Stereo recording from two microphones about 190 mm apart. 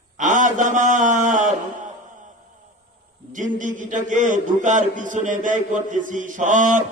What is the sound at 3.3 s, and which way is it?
A man's voice, 40° right (ahead or behind).